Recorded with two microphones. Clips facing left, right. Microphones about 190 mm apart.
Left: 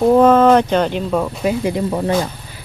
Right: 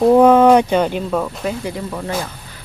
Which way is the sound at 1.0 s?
5° left (ahead or behind).